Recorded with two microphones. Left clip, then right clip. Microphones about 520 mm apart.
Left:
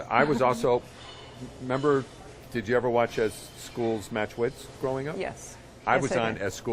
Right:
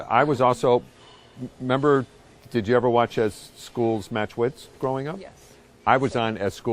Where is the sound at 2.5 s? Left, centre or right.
Right.